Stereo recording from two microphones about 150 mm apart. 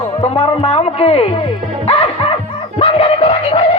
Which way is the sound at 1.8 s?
40° left (ahead or behind).